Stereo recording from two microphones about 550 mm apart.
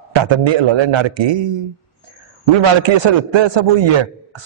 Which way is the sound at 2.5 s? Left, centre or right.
Right.